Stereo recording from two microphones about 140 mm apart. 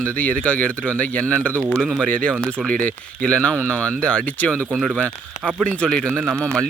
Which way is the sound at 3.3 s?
5° left (ahead or behind).